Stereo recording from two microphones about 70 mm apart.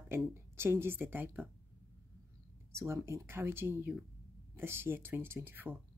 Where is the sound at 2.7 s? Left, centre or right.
Right.